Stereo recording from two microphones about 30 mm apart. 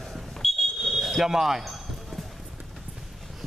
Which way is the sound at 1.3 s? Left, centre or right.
Centre.